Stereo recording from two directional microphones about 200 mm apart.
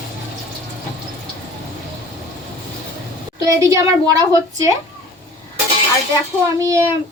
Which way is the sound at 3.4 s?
20° right (ahead or behind).